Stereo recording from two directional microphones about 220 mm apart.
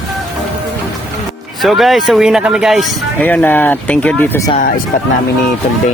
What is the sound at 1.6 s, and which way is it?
Speech, centre (ahead or behind).